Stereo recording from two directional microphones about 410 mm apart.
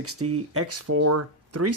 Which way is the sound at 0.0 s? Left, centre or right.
Right.